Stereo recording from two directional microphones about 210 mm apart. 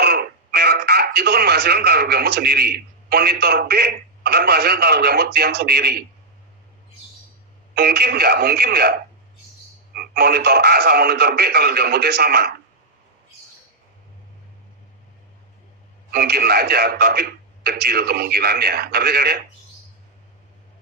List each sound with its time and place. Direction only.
0.0 s speech: 50° right (ahead or behind)
7.8 s a man's voice: 50° right (ahead or behind)
16.1 s a man's voice: 50° right (ahead or behind)